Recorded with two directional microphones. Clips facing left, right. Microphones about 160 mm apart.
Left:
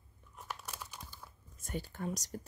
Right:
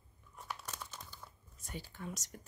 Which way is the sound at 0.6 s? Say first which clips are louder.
Left 1 dB; 10° left (ahead or behind).